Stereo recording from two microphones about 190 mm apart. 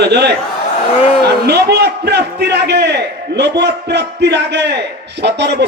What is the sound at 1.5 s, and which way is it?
A man's voice, 65° right (ahead or behind).